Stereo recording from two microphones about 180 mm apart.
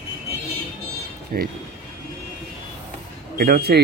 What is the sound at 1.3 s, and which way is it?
Speech, 50° right (ahead or behind).